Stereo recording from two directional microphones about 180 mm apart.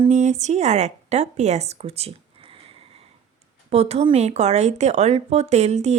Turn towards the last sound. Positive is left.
turn(degrees=-40)  # may be behind; listen again after turning